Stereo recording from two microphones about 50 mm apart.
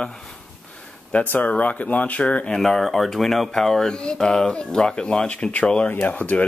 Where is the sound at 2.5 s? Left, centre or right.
Centre; by 5.9 s left.